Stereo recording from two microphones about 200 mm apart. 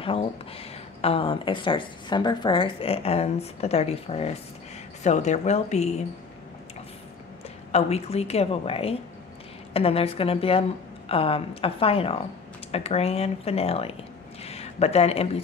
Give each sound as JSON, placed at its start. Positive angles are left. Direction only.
{"t": 0.0, "sound": "a woman's voice", "side_deg": 30}
{"t": 7.7, "sound": "a woman's voice", "side_deg": 30}